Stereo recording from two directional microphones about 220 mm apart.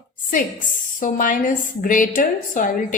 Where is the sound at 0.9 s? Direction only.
35° left (ahead or behind).